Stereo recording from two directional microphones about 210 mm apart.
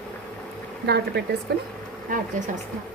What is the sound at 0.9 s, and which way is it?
Speech, 50° right (ahead or behind).